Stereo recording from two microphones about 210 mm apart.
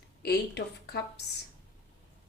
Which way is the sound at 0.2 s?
50° left (ahead or behind).